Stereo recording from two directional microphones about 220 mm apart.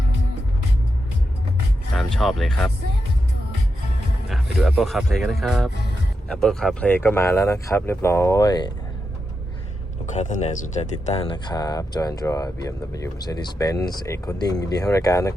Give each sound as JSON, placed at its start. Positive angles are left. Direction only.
{"t": 2.0, "sound": "speech", "side_deg": 0}
{"t": 4.3, "sound": "speech", "side_deg": 0}
{"t": 10.1, "sound": "speech", "side_deg": 35}